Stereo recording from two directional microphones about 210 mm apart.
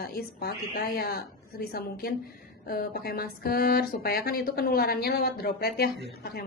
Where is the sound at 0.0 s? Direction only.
50° left (ahead or behind).